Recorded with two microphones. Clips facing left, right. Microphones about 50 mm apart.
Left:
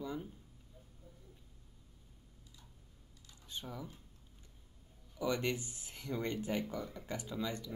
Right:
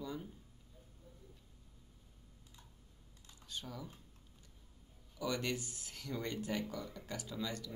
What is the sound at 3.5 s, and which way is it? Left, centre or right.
Speech, centre.